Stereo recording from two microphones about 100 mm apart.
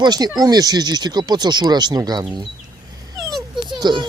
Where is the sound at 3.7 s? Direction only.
50° right (ahead or behind).